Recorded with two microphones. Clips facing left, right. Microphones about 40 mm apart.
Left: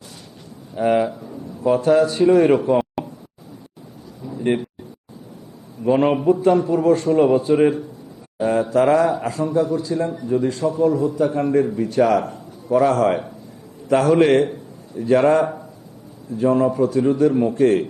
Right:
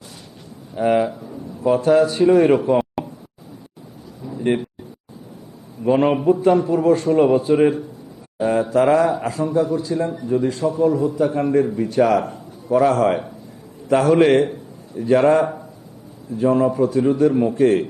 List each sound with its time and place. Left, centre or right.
0.8 s a man's voice: centre
4.3 s a sound: centre
5.8 s a man's voice: centre